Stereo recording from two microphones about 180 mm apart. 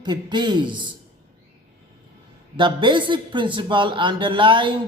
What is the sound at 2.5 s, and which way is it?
A woman's voice, 25° right (ahead or behind).